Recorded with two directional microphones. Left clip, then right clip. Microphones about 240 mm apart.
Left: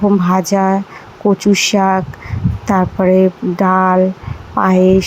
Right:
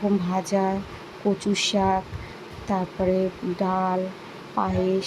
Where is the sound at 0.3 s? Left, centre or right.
Left.